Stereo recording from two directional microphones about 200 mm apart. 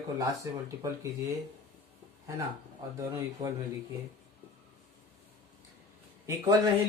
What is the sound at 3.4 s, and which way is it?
Speech, 15° right (ahead or behind).